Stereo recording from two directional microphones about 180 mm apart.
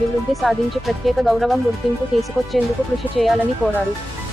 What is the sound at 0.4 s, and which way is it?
Speech, centre (ahead or behind).